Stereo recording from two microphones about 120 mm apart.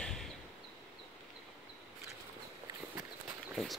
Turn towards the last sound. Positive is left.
turn(degrees=0)  # may be behind; listen again after turning